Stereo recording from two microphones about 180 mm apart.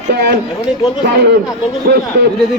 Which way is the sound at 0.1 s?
65° right (ahead or behind).